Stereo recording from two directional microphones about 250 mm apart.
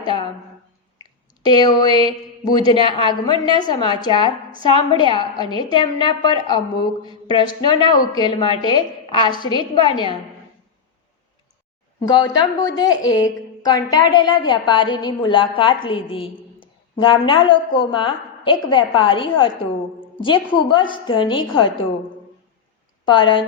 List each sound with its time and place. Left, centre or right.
0.0 s a woman's voice: centre
12.0 s a woman's voice: centre
23.0 s a woman's voice: centre